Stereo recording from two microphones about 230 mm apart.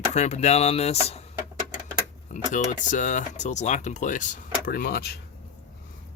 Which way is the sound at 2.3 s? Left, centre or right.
Left.